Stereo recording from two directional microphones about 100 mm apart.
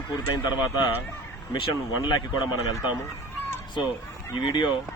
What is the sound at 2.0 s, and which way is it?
Speech, 45° left (ahead or behind).